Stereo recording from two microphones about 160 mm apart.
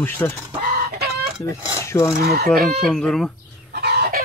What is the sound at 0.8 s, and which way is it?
Chicken, 75° right (ahead or behind).